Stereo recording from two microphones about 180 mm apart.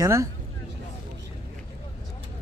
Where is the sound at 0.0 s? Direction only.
15° right (ahead or behind).